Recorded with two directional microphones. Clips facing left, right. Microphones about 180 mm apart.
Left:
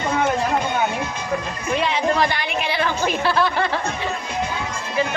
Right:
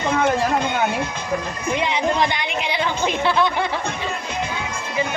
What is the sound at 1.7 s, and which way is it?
A woman's voice, 20° right (ahead or behind).